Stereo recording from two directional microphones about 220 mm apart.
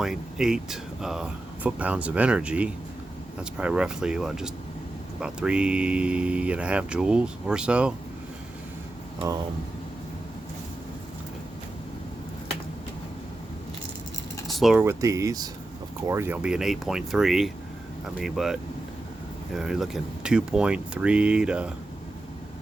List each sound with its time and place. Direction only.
0.0 s speech: centre (ahead or behind)
9.1 s speech: 15° right (ahead or behind)
14.4 s speech: centre (ahead or behind)
19.5 s speech: centre (ahead or behind)